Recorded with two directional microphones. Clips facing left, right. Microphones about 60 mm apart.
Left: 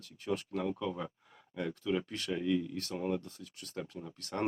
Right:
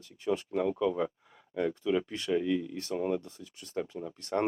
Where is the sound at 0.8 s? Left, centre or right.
Right.